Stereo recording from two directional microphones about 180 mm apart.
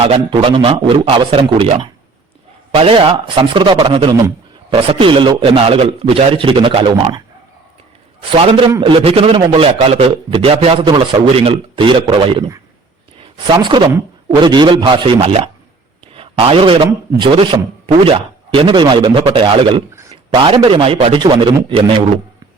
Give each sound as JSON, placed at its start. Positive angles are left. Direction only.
{"t": 0.0, "sound": "a man's voice", "side_deg": -30}
{"t": 8.4, "sound": "a man's voice", "side_deg": -30}